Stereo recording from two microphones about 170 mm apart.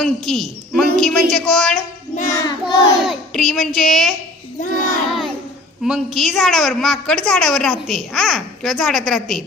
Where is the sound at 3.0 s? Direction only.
Centre (ahead or behind).